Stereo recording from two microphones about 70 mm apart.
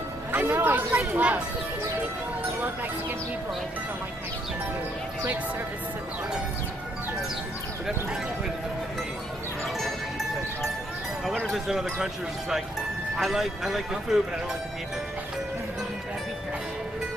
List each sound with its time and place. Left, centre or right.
0.3 s speech: right
11.5 s speech: centre